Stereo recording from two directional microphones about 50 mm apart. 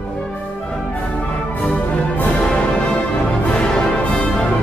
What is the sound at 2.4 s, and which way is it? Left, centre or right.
Music, left.